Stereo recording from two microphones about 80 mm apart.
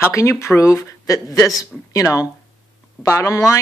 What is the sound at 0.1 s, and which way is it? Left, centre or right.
Speech, left.